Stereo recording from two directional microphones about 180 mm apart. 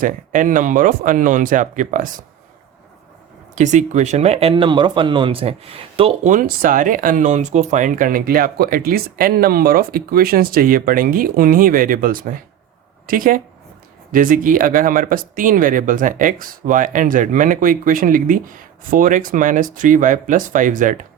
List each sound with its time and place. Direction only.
0.0 s speech: 50° right (ahead or behind)
3.5 s speech: 40° right (ahead or behind)
6.3 s speech: 50° right (ahead or behind)